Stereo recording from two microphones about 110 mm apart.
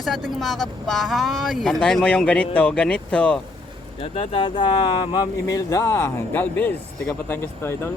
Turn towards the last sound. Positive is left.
turn(degrees=20)  # may be behind; listen again after turning